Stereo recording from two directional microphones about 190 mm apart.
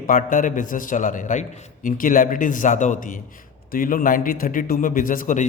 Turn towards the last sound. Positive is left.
turn(degrees=45)  # may be behind; listen again after turning